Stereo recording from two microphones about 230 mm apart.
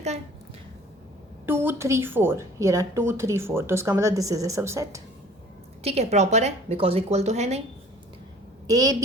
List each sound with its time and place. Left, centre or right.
1.5 s a woman's voice: centre
5.8 s a woman's voice: right
8.6 s a woman's voice: centre